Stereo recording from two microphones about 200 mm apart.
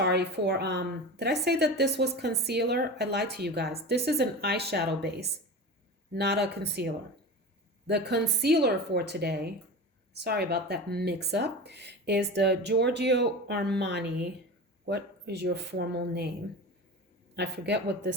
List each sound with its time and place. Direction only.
0.0 s speech: 55° right (ahead or behind)
17.3 s speech: 60° right (ahead or behind)